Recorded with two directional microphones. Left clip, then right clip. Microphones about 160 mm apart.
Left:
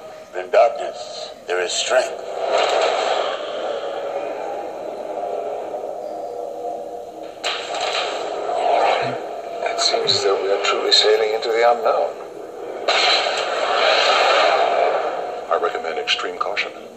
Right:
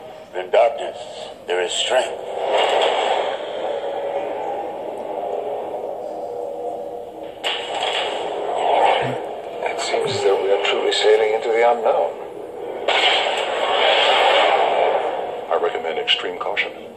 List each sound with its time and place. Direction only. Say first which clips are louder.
0.4 s a man's voice: left 1 dB; 35° left (ahead or behind)
1.5 s radio: even; 35° left (ahead or behind)
7.4 s a sound: right 1 dB; 35° left (ahead or behind)
12.9 s scrape: even; 35° left (ahead or behind)